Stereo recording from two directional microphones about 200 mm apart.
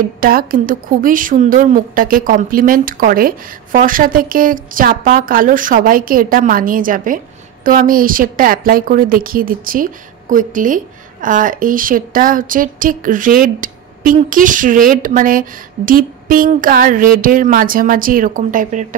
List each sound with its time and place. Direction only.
0.0 s a woman's voice: 45° right (ahead or behind)